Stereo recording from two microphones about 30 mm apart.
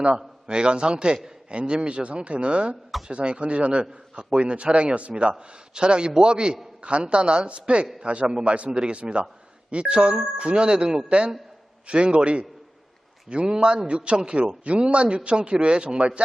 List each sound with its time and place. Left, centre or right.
0.1 s a man's voice: right